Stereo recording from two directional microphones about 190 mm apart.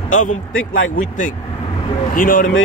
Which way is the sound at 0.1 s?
40° left (ahead or behind).